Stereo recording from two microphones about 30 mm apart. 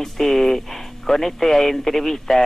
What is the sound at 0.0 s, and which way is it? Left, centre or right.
Speech, centre.